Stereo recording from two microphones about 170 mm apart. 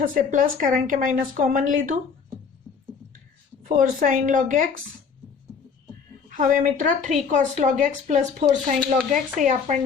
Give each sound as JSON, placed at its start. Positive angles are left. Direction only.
{"t": 0.0, "sound": "speech", "side_deg": -55}
{"t": 2.7, "sound": "music", "side_deg": -10}
{"t": 3.7, "sound": "speech", "side_deg": -50}
{"t": 6.3, "sound": "speech", "side_deg": -50}